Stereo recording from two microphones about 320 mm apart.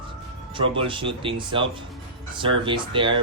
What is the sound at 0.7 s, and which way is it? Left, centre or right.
Speech, centre.